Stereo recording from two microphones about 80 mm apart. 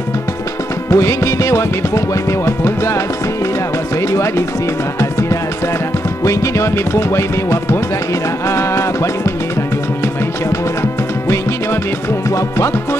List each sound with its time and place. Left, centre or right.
0.8 s music: left
4.1 s music: left
6.2 s music: left
10.8 s music: left